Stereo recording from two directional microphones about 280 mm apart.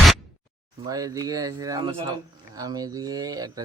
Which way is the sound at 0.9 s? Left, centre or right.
Centre.